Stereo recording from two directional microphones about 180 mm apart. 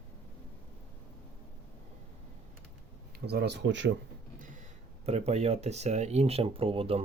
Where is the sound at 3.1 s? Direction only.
65° right (ahead or behind); by 3.9 s 85° right.